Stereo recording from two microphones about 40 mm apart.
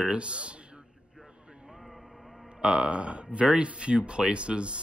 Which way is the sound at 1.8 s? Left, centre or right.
Centre.